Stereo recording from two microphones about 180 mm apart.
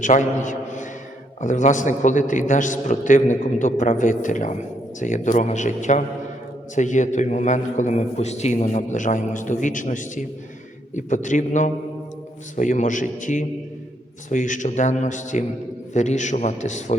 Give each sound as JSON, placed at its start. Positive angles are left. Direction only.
{"t": 0.0, "sound": "a man's voice", "side_deg": 45}